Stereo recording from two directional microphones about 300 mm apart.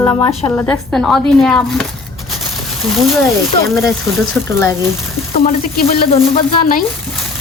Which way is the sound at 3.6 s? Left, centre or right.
Centre.